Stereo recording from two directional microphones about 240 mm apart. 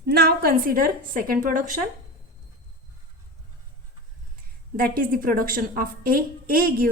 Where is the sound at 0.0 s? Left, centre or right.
Right.